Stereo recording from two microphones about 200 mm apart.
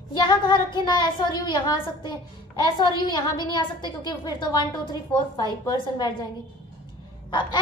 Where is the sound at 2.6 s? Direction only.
20° left (ahead or behind).